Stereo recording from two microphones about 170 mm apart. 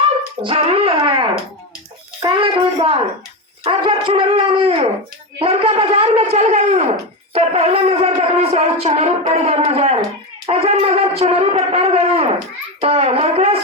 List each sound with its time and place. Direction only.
0.4 s shofar: 35° right (ahead or behind)